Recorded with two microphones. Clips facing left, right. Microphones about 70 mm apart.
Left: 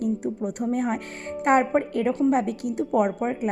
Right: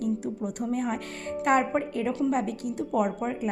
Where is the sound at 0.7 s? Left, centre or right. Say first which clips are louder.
Left 3 dB; left.